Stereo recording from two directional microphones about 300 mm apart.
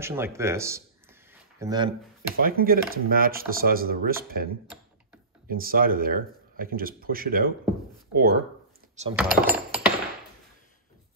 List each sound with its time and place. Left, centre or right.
0.0 s a man's voice: centre
1.3 s a sound: centre
2.3 s speech: right
5.5 s speech: right
9.1 s coin: centre